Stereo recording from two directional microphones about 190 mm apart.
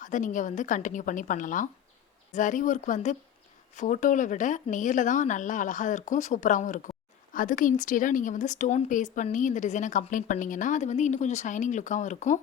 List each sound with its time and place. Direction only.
0.0 s a woman's voice: 40° left (ahead or behind)